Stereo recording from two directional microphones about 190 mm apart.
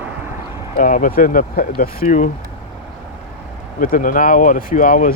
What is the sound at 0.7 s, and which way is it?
Speech, 45° left (ahead or behind).